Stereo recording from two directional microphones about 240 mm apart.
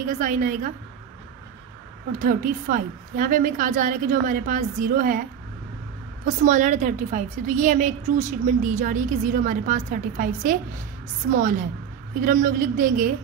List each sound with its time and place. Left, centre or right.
0.1 s a woman's voice: right
2.1 s a woman's voice: right
6.2 s a woman's voice: right